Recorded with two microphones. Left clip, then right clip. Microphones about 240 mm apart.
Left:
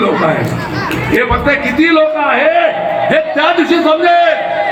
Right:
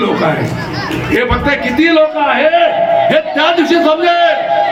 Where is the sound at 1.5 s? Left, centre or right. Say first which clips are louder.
Left 1 dB; right.